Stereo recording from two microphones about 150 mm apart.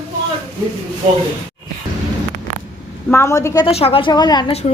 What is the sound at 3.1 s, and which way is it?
Speech, 15° left (ahead or behind).